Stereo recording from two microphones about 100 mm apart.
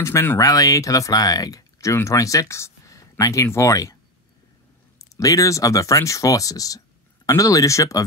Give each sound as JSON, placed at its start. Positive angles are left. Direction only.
{"t": 0.0, "sound": "speech", "side_deg": 25}